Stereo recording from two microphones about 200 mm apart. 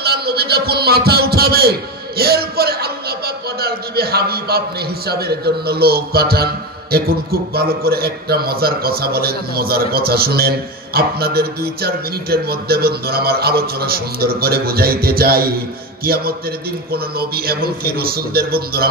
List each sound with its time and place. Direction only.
0.0 s a man's voice: 55° right (ahead or behind)